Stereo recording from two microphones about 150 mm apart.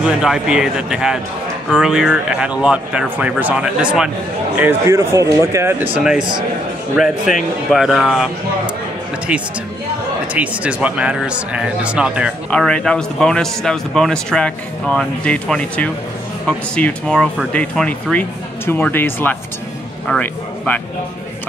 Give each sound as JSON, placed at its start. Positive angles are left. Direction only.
{"t": 0.0, "sound": "a man's voice", "side_deg": -5}
{"t": 4.6, "sound": "speech", "side_deg": -15}
{"t": 5.9, "sound": "a man's voice", "side_deg": -5}
{"t": 7.7, "sound": "a man's voice", "side_deg": 0}
{"t": 12.4, "sound": "a man's voice", "side_deg": 5}